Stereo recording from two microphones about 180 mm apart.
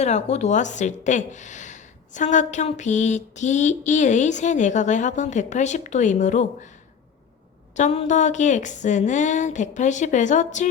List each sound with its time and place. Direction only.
0.0 s a woman's voice: 40° left (ahead or behind)
7.8 s a woman's voice: 40° left (ahead or behind)